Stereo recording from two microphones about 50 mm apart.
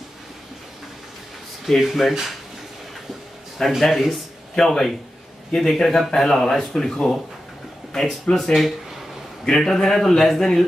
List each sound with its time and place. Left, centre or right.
1.8 s speech: centre
3.5 s speech: centre